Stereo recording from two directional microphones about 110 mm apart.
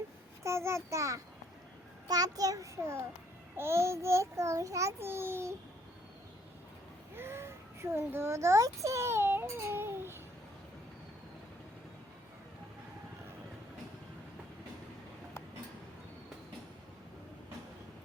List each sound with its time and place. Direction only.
0.4 s a child's voice: 25° right (ahead or behind)
7.2 s a child's voice: 25° right (ahead or behind)